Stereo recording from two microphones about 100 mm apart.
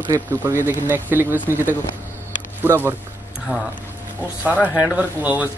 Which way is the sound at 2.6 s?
20° right (ahead or behind).